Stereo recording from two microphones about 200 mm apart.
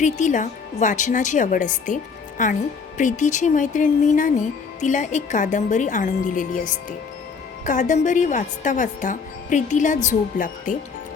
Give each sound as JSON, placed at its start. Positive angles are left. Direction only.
{"t": 0.0, "sound": "speech", "side_deg": 40}